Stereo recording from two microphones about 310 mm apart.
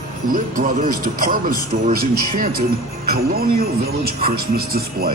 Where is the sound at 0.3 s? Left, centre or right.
Right.